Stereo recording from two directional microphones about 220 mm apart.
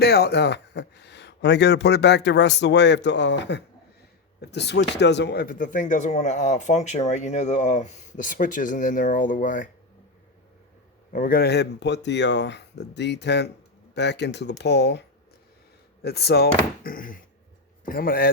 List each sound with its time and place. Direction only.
0.0 s speech: 45° left (ahead or behind)
11.1 s speech: 40° left (ahead or behind)
16.0 s speech: 45° left (ahead or behind)